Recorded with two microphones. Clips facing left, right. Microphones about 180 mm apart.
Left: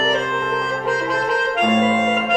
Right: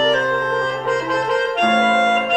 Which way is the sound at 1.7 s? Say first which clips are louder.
Right 1 dB; 75° right (ahead or behind).